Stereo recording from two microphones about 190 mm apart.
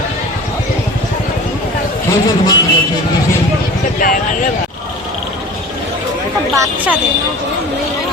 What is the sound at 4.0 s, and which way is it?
Speech, 45° left (ahead or behind).